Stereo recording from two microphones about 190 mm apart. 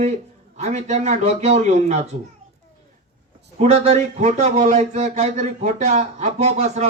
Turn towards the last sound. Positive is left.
turn(degrees=-35)  # may be behind; listen again after turning